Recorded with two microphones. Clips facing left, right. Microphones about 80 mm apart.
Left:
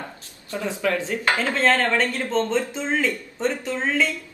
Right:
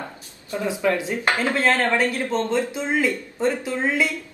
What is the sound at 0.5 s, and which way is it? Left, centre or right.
Speech, centre.